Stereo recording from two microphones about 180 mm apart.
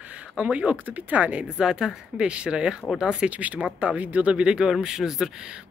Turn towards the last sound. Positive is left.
turn(degrees=-5)  # may be behind; listen again after turning